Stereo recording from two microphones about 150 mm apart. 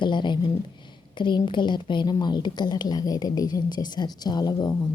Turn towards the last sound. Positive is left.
turn(degrees=30)  # may be behind; listen again after turning